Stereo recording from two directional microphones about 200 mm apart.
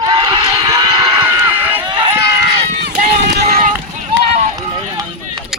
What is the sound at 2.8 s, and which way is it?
Run, 50° right (ahead or behind).